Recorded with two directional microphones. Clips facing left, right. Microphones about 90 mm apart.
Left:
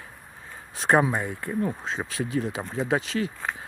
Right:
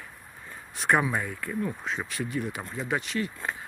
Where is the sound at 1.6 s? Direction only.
35° left (ahead or behind).